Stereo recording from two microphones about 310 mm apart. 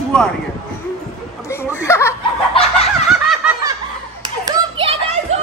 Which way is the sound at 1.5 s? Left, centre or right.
Centre.